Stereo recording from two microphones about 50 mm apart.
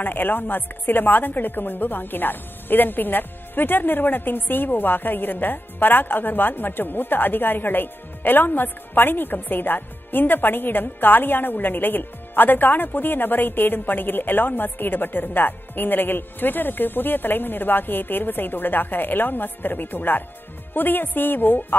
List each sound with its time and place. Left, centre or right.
0.0 s speech: left